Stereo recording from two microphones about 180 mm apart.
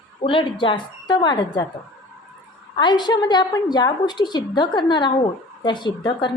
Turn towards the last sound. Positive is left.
turn(degrees=25)  # may be behind; listen again after turning